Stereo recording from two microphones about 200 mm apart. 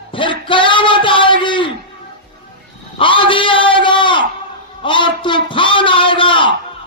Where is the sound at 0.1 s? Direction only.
25° left (ahead or behind).